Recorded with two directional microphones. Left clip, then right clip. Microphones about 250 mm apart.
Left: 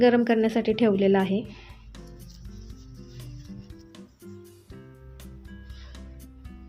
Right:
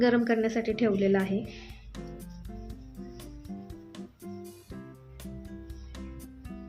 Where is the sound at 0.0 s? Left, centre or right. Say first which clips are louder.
Left 5 dB; centre.